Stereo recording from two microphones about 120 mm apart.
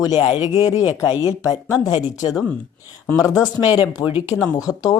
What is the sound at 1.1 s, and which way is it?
Speech, 20° right (ahead or behind).